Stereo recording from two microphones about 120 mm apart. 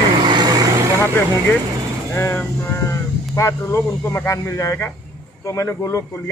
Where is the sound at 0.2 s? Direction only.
40° right (ahead or behind).